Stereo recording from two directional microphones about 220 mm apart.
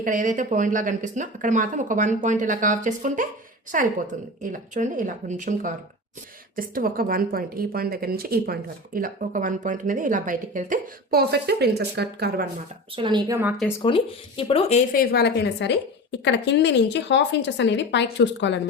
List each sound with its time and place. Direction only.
0.0 s a woman's voice: 35° right (ahead or behind)
13.0 s a woman's voice: 20° right (ahead or behind)
13.8 s speech: 25° left (ahead or behind)
15.1 s speech: 50° left (ahead or behind)